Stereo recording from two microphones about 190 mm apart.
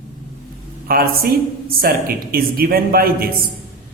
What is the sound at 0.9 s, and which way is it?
Speech, 50° right (ahead or behind).